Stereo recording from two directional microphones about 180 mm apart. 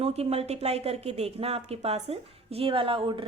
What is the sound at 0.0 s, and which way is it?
Speech, 35° right (ahead or behind).